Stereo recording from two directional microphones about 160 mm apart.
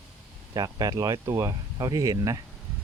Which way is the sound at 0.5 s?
25° right (ahead or behind).